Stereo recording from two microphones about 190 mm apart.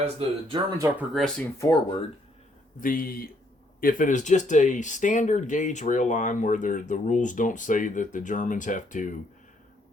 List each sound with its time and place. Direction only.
0.0 s speech: 25° right (ahead or behind)
0.9 s speech: 10° right (ahead or behind)
1.5 s speech: 15° left (ahead or behind)
2.8 s speech: 50° left (ahead or behind)